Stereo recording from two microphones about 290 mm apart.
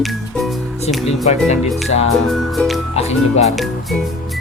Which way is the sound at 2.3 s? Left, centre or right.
Centre.